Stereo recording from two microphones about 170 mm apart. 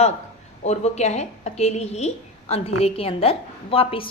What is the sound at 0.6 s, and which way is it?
A woman's voice, 40° left (ahead or behind).